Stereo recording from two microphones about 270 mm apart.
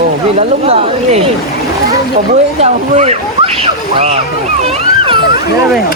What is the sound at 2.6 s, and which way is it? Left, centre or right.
Speech, right.